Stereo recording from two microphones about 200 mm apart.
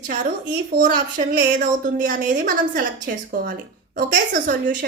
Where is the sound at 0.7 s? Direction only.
45° right (ahead or behind).